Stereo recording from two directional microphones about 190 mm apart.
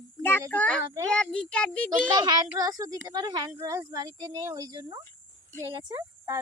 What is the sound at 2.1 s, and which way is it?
Speech, 20° right (ahead or behind).